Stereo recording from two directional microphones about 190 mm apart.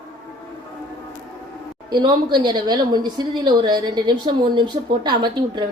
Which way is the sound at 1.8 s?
20° right (ahead or behind).